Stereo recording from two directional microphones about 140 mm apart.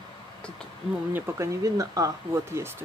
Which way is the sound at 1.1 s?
20° right (ahead or behind).